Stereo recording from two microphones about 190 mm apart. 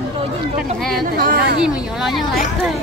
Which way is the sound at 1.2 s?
50° right (ahead or behind).